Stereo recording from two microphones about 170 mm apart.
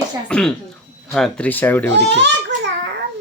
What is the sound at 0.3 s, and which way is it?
Speech, 5° left (ahead or behind).